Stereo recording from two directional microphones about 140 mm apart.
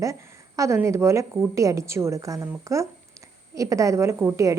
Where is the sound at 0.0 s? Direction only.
25° right (ahead or behind).